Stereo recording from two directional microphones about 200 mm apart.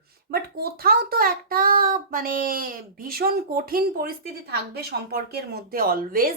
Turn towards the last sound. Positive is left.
turn(degrees=-45)  # may be behind; listen again after turning